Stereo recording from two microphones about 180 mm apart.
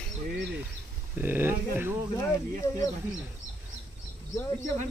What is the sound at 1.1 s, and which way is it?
Speech, 10° right (ahead or behind).